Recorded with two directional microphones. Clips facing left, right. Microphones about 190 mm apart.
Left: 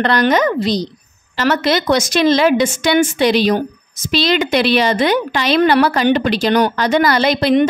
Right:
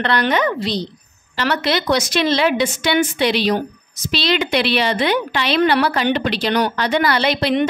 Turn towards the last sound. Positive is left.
turn(degrees=45)  # may be behind; listen again after turning